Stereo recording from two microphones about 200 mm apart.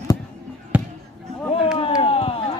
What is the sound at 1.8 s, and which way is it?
Speech, 30° left (ahead or behind).